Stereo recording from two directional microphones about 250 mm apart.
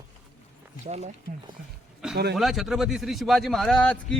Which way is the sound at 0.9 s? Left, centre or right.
Right.